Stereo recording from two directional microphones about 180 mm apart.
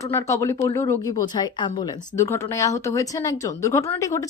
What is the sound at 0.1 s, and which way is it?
A woman's voice, 15° left (ahead or behind).